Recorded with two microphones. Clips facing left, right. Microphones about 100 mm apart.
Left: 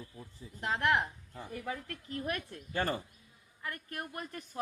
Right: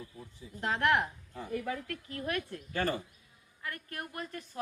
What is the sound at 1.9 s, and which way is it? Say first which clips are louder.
A woman's voice: right 1 dB; 20° left (ahead or behind).